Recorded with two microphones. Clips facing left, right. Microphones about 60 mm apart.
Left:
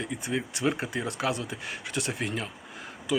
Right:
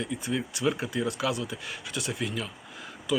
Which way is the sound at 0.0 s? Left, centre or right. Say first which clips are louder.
Even; left.